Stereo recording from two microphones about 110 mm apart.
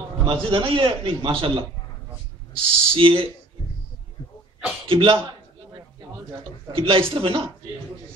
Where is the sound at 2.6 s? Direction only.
55° right (ahead or behind).